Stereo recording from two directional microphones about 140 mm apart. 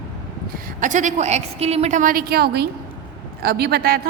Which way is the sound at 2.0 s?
85° right.